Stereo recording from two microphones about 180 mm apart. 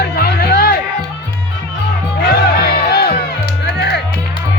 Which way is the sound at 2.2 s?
60° left (ahead or behind).